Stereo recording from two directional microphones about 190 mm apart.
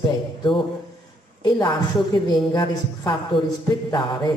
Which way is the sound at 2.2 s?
20° left (ahead or behind).